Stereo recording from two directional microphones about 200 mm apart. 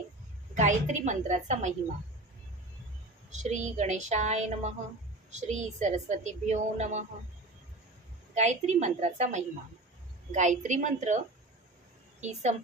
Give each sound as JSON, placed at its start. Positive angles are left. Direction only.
{"t": 0.5, "sound": "a woman's voice", "side_deg": -40}
{"t": 3.3, "sound": "a woman's voice", "side_deg": -35}
{"t": 8.4, "sound": "a woman's voice", "side_deg": -35}
{"t": 12.2, "sound": "a woman's voice", "side_deg": -35}